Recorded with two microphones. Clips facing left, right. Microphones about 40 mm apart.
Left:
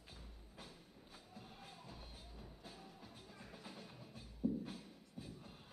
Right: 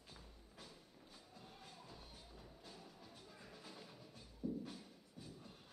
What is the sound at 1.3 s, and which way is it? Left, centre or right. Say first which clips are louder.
Music: left 3 dB; centre.